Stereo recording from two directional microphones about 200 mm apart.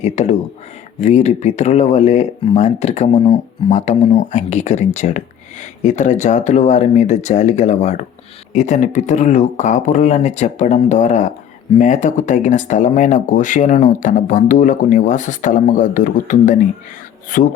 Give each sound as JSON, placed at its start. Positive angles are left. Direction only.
{"t": 0.0, "sound": "speech", "side_deg": 35}